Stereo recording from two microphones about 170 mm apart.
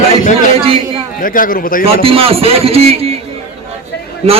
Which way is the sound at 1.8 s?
35° right (ahead or behind).